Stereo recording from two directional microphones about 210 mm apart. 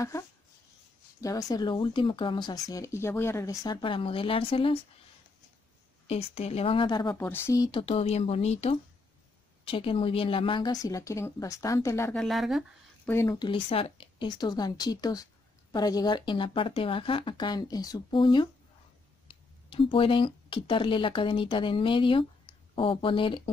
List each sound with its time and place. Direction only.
1.2 s speech: 15° left (ahead or behind)
6.0 s speech: 30° left (ahead or behind)
7.8 s speech: 30° left (ahead or behind); by 13.1 s centre (ahead or behind)
13.1 s speech: 15° left (ahead or behind)